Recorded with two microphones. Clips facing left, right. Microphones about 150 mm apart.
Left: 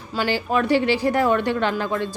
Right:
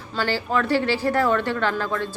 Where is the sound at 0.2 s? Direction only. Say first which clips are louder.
Left 2 dB; 15° left (ahead or behind).